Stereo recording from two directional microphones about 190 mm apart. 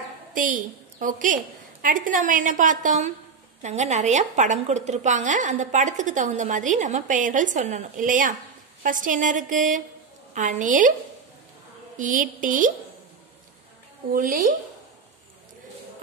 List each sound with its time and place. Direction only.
0.3 s a woman's voice: 45° right (ahead or behind)
12.0 s a woman's voice: 45° right (ahead or behind)
14.1 s a woman's voice: 45° right (ahead or behind)